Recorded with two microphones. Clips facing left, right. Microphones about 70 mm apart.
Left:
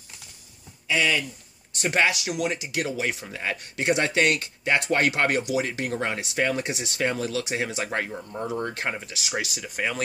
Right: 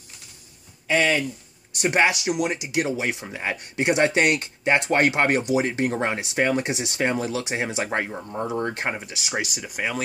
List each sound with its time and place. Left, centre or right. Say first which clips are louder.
0.8 s speech: right 3 dB; right
1.8 s speech: right 3 dB; right